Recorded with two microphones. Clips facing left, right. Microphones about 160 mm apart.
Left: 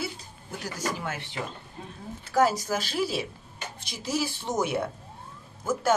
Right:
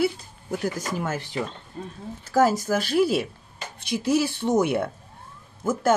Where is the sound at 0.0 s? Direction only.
55° right (ahead or behind).